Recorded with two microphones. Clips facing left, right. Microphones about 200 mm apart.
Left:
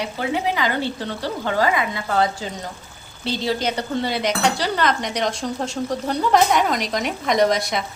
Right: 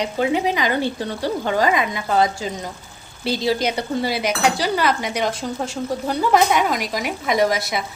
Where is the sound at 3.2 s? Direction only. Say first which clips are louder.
Right 2 dB; 10° right (ahead or behind).